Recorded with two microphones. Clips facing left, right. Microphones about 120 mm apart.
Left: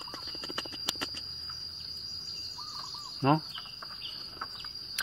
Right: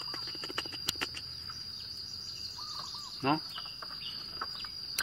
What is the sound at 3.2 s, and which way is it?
Speech, 25° left (ahead or behind).